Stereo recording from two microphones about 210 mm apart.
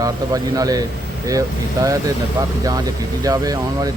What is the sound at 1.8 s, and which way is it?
Speech, 15° right (ahead or behind).